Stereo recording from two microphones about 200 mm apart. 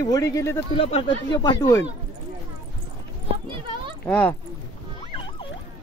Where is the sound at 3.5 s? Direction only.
25° right (ahead or behind).